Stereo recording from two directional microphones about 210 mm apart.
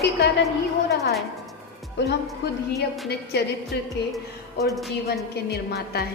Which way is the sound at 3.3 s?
50° left (ahead or behind).